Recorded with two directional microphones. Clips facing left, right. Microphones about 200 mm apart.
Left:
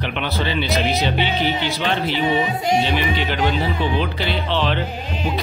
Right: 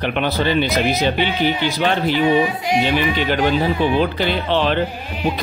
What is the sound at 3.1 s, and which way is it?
Speech, 45° right (ahead or behind).